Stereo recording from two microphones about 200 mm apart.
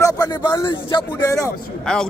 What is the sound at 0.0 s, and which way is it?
Speech, 20° left (ahead or behind).